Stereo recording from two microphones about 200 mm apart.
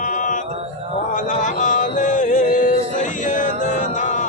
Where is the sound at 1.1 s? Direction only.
40° left (ahead or behind).